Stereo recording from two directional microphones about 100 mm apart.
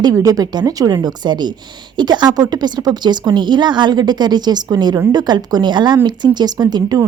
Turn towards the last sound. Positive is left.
turn(degrees=-40)  # may be behind; listen again after turning